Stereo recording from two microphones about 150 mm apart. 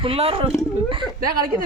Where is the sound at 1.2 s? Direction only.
75° right (ahead or behind).